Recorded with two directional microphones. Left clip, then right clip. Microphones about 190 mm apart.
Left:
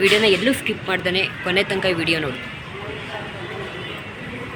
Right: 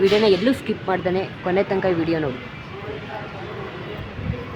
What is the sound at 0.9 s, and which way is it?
Speech, 15° right (ahead or behind).